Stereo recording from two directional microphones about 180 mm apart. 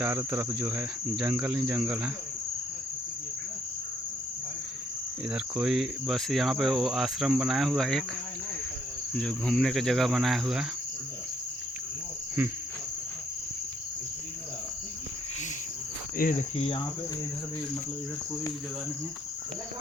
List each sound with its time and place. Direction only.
0.0 s cricket: 10° right (ahead or behind)
5.3 s cricket: 5° right (ahead or behind)
9.1 s cricket: 5° left (ahead or behind)
16.2 s cricket: 55° left (ahead or behind)
16.6 s cricket: 35° left (ahead or behind)